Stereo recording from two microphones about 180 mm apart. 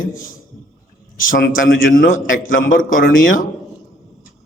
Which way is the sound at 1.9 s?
50° left (ahead or behind).